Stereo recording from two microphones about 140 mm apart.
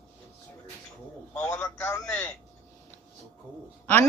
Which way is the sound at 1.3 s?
20° left (ahead or behind).